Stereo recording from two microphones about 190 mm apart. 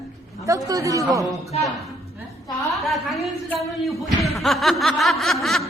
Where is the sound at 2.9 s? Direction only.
Centre (ahead or behind).